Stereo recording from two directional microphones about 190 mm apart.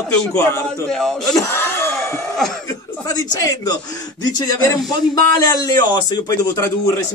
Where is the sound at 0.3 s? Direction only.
15° left (ahead or behind).